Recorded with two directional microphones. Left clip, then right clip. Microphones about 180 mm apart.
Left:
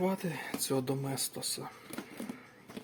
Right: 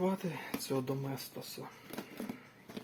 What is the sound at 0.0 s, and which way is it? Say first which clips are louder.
Speech: left 2 dB; 20° left (ahead or behind).